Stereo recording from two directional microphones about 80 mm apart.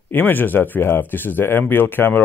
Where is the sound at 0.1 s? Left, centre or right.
Left.